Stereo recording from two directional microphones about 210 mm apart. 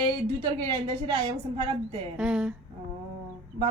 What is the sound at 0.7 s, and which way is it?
A woman's voice, 20° right (ahead or behind).